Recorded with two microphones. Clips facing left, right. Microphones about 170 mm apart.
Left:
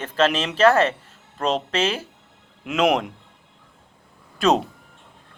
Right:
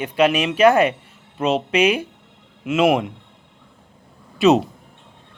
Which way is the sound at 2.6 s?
5° right (ahead or behind).